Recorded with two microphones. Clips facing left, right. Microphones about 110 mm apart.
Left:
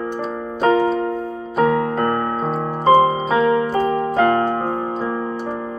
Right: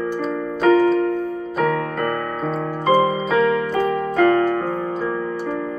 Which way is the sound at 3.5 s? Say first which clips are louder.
Left 2 dB; 30° left (ahead or behind).